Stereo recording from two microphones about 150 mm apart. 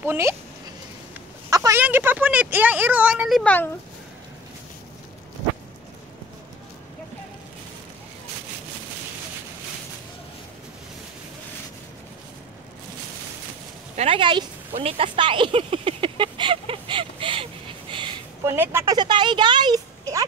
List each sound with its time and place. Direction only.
0.0 s speech: 15° right (ahead or behind)
1.5 s a sound: 25° right (ahead or behind)
1.8 s speech: 15° right (ahead or behind)
13.9 s a sound: 35° right (ahead or behind)
18.4 s speech: 15° right (ahead or behind)
18.9 s speech: 30° right (ahead or behind)